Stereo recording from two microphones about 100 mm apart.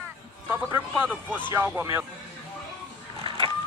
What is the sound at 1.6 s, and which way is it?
Speech, 20° right (ahead or behind).